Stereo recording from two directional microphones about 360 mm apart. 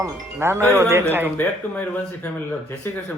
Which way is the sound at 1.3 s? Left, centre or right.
Centre.